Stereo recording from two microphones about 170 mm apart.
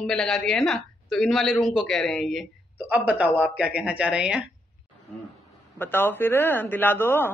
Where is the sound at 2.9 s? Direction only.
10° right (ahead or behind).